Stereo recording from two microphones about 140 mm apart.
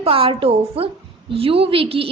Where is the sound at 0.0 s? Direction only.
40° right (ahead or behind).